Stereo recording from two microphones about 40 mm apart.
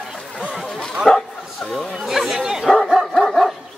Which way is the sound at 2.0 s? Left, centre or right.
Centre.